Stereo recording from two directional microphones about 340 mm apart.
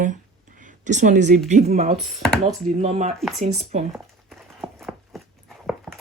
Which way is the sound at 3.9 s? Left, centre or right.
Centre.